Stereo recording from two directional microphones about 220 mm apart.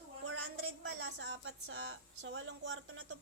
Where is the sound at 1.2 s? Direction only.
55° right (ahead or behind).